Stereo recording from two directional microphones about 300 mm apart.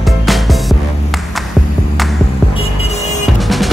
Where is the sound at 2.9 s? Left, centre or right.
Left.